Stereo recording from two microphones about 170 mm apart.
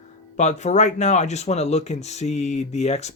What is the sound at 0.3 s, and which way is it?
Speech, 45° left (ahead or behind).